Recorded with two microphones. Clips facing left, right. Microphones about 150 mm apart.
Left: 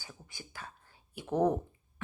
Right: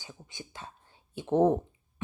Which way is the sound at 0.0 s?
20° right (ahead or behind).